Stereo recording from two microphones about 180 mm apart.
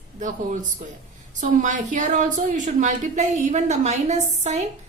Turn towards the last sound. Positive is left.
turn(degrees=-40)  # may be behind; listen again after turning